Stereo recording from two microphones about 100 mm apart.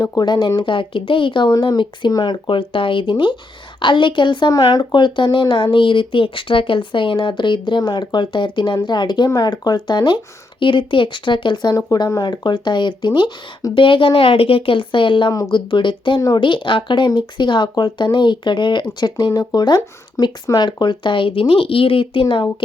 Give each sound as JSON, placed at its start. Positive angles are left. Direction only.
{"t": 0.2, "sound": "a woman's voice", "side_deg": 45}
{"t": 10.6, "sound": "speech", "side_deg": 55}
{"t": 11.8, "sound": "speech", "side_deg": 35}
{"t": 12.2, "sound": "a woman's voice", "side_deg": 45}